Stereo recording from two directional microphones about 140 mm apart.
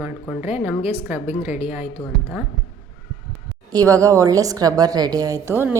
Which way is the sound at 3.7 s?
25° right (ahead or behind).